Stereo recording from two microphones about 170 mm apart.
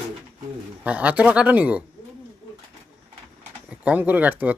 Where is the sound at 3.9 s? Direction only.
10° right (ahead or behind).